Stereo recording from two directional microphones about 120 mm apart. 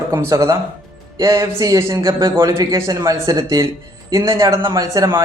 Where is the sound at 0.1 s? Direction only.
25° right (ahead or behind).